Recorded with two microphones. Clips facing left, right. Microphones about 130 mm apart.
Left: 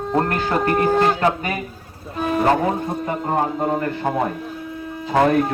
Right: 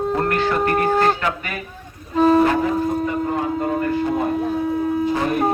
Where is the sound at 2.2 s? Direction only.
35° right (ahead or behind).